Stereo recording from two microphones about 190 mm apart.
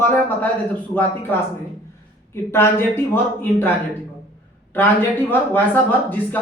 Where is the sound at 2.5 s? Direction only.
10° left (ahead or behind).